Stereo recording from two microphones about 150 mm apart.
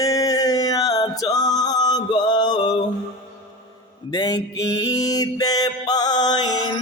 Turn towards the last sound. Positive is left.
turn(degrees=30)  # may be behind; listen again after turning